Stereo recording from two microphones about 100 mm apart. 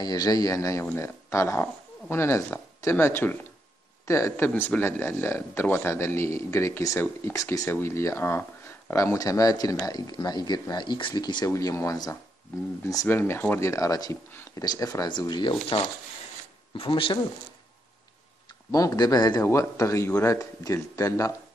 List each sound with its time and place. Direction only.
0.0 s speech: 40° left (ahead or behind)
11.5 s speech: 30° left (ahead or behind)
13.1 s speech: 20° left (ahead or behind)
13.6 s speech: 30° left (ahead or behind); by 15.8 s 50° left (ahead or behind)
16.7 s speech: 65° left (ahead or behind)
18.7 s speech: 35° left (ahead or behind)
19.4 s speech: 30° left (ahead or behind)